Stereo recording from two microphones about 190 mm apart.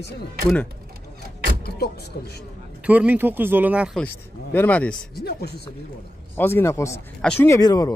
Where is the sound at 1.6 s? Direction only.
55° left (ahead or behind).